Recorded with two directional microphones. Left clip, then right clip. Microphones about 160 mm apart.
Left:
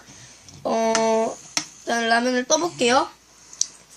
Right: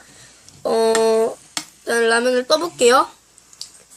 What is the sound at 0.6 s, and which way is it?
Speech, 40° right (ahead or behind).